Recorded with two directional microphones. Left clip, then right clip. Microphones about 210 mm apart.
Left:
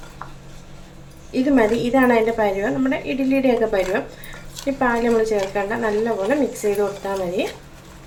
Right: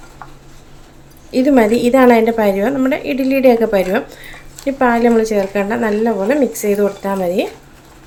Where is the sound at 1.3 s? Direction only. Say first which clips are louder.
Right 6 dB; 55° right (ahead or behind).